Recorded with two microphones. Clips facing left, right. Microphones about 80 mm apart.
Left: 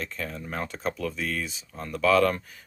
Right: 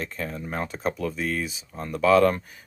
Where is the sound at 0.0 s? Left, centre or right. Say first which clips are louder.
Right 2 dB; centre.